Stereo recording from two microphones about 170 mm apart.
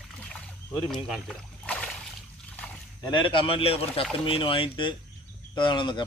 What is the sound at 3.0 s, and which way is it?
A man's voice, 30° left (ahead or behind).